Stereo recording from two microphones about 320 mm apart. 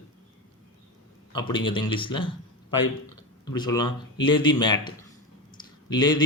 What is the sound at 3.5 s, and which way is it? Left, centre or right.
Speech, centre.